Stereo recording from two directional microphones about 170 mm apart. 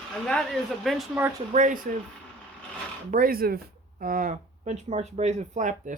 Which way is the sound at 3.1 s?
55° right (ahead or behind).